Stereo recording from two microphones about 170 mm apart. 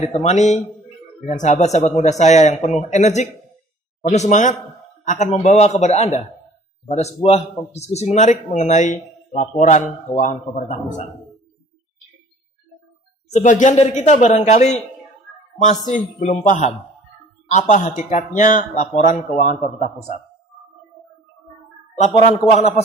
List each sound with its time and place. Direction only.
0.0 s a man's voice: 40° left (ahead or behind)
13.3 s a man's voice: 45° left (ahead or behind)